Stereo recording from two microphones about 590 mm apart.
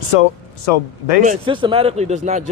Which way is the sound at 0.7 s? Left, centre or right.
Left.